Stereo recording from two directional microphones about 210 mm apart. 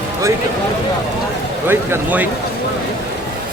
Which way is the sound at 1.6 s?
10° right (ahead or behind).